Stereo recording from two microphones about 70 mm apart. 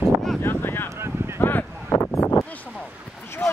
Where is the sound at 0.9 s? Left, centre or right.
Right.